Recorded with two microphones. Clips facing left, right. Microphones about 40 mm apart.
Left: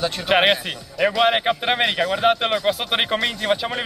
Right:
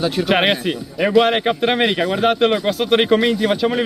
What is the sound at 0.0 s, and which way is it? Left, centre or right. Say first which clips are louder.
Speech: right 2 dB; centre.